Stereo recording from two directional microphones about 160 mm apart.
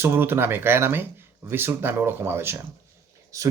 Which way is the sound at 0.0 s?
15° right (ahead or behind).